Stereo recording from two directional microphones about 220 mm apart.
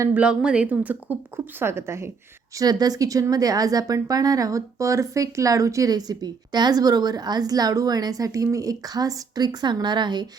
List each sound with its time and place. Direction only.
0.0 s speech: 5° right (ahead or behind)